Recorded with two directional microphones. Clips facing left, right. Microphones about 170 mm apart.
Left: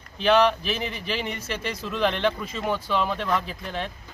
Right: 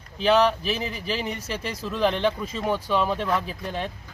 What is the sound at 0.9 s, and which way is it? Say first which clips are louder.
Speech: right 1 dB; 35° right (ahead or behind).